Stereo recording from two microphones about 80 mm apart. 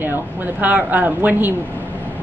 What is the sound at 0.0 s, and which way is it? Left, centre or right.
Speech, right.